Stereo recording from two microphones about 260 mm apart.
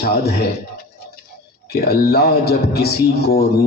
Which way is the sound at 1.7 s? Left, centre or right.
Left.